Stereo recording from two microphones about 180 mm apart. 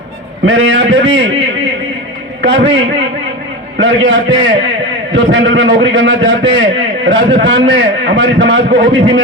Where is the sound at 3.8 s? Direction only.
90° right.